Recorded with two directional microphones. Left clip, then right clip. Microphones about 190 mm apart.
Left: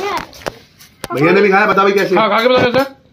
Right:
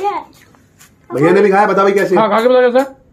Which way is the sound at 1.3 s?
5° left (ahead or behind).